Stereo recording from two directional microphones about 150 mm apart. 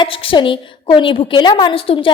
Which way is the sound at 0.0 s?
35° left (ahead or behind).